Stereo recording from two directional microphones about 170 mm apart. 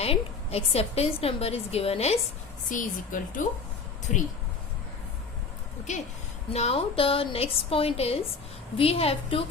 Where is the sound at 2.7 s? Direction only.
50° left (ahead or behind).